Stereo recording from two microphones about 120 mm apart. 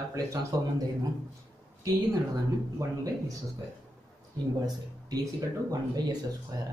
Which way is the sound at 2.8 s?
25° right (ahead or behind).